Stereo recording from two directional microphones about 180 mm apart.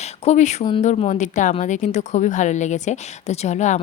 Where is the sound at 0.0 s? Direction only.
40° left (ahead or behind).